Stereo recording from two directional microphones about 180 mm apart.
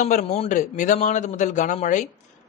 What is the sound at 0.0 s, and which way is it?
Speech, 40° left (ahead or behind).